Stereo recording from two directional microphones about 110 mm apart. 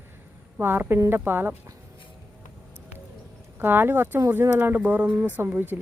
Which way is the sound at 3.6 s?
20° right (ahead or behind).